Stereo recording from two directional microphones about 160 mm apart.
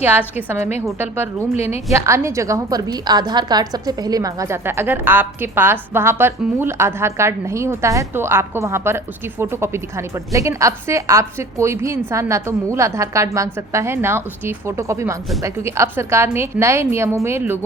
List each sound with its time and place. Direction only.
0.0 s a woman's voice: 10° right (ahead or behind)
1.5 s a woman's voice: 40° left (ahead or behind)
1.9 s a woman's voice: 15° right (ahead or behind)